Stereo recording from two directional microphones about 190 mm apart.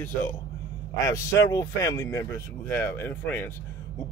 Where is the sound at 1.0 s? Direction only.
15° left (ahead or behind).